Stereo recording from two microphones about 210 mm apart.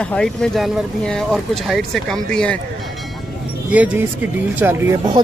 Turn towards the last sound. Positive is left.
turn(degrees=-15)  # may be behind; listen again after turning